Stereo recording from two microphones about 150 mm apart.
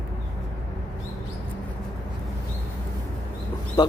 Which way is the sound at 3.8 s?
25° left (ahead or behind).